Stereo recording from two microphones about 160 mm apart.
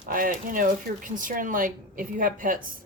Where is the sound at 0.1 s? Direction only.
60° right (ahead or behind).